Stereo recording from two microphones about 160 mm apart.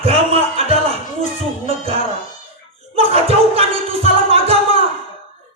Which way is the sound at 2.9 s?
40° right (ahead or behind).